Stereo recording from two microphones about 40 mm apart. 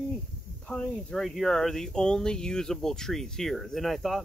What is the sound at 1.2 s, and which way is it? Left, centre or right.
Speech, centre.